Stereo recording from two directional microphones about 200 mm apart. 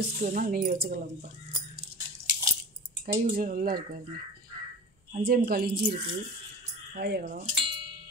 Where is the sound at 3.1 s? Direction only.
45° right (ahead or behind).